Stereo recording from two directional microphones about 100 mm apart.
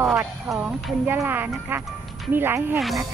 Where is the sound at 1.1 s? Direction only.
20° right (ahead or behind).